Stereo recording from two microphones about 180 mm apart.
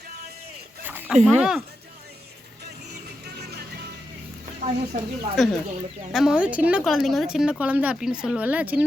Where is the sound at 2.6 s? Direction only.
65° right (ahead or behind).